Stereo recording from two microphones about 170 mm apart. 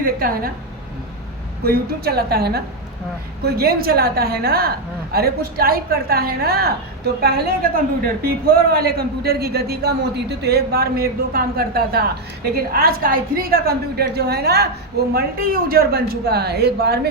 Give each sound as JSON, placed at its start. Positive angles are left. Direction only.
{"t": 0.0, "sound": "a man's voice", "side_deg": -60}
{"t": 1.6, "sound": "a woman's voice", "side_deg": -65}
{"t": 15.7, "sound": "a woman's voice", "side_deg": -70}